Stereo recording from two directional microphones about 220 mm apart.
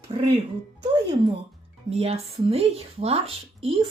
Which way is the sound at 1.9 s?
25° right (ahead or behind).